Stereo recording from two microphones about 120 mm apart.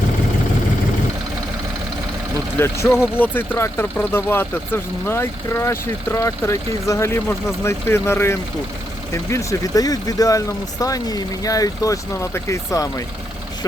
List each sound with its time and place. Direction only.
2.6 s speech: 20° left (ahead or behind)